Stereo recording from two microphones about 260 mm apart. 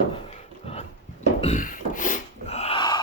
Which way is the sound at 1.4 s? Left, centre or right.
Left.